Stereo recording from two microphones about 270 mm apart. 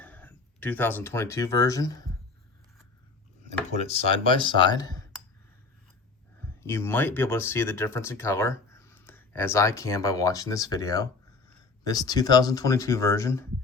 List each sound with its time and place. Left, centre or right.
0.0 s speech: centre
3.8 s speech: left
6.6 s speech: centre